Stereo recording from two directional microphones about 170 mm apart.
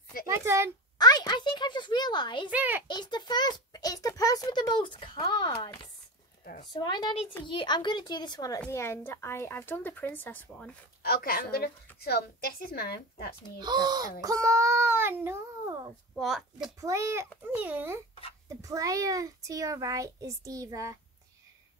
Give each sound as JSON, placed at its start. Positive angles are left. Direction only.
{"t": 0.3, "sound": "a child's voice", "side_deg": -15}
{"t": 0.9, "sound": "a sound", "side_deg": 25}
{"t": 2.5, "sound": "a child's voice", "side_deg": -10}
{"t": 2.9, "sound": "a child's voice", "side_deg": 25}
{"t": 8.5, "sound": "speech", "side_deg": 10}
{"t": 11.1, "sound": "a woman's voice", "side_deg": 65}
{"t": 13.6, "sound": "a child's voice", "side_deg": -25}
{"t": 16.2, "sound": "speech", "side_deg": 0}
{"t": 16.8, "sound": "a child's voice", "side_deg": -15}